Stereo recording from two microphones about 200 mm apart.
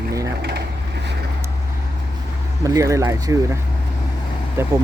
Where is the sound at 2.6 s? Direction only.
15° right (ahead or behind).